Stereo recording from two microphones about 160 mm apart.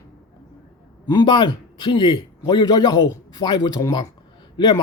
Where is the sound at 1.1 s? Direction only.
30° left (ahead or behind).